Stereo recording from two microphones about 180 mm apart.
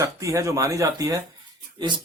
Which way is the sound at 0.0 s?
15° right (ahead or behind).